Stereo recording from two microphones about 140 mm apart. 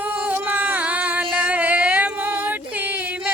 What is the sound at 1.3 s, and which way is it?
Female singing, 10° right (ahead or behind).